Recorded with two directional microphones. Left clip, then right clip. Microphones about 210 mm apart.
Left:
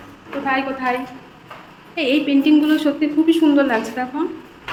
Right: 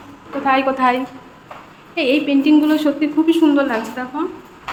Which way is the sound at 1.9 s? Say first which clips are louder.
Right 1 dB; 10° right (ahead or behind).